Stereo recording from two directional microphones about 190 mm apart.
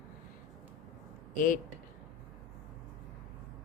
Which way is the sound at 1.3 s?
45° left (ahead or behind).